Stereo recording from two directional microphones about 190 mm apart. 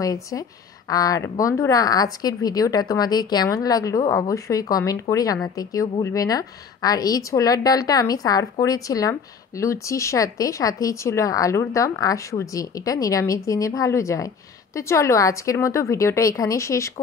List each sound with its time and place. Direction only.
0.0 s speech: 20° left (ahead or behind)